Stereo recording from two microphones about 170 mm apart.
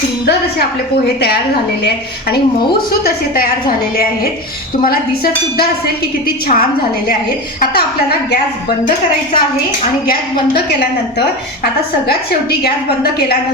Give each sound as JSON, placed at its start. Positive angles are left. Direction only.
{"t": 3.0, "sound": "a woman's voice", "side_deg": 60}
{"t": 10.1, "sound": "a woman's voice", "side_deg": 65}